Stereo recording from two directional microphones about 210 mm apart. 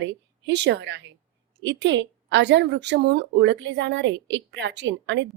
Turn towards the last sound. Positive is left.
turn(degrees=-60)  # may be behind; listen again after turning